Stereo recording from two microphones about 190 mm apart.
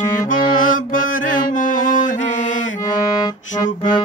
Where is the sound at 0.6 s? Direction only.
45° left (ahead or behind).